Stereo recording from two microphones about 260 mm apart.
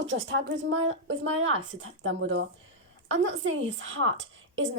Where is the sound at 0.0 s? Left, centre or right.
Right.